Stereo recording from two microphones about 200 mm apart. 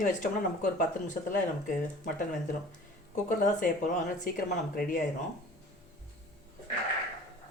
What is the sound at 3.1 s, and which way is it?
Speech, 40° left (ahead or behind).